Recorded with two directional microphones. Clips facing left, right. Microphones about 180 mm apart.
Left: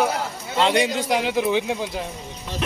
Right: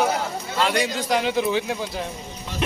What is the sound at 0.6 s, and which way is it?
A man's voice, 20° left (ahead or behind).